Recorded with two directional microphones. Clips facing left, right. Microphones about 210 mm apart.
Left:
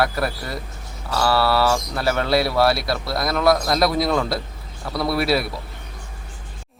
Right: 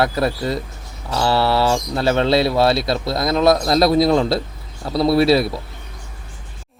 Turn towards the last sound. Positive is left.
turn(degrees=-25)  # may be behind; listen again after turning